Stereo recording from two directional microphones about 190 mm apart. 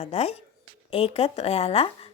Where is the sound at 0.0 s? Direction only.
35° left (ahead or behind).